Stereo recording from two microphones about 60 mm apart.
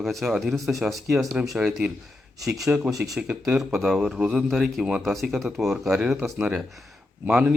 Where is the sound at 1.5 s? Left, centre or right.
Centre.